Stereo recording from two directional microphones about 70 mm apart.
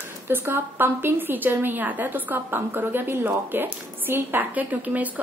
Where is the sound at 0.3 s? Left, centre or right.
Right.